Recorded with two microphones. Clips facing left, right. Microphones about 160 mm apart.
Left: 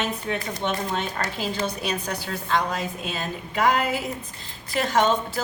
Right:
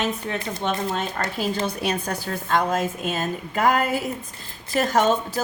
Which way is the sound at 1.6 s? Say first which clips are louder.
Right 2 dB; 55° right (ahead or behind).